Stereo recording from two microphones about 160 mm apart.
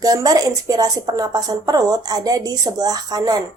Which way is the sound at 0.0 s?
25° right (ahead or behind).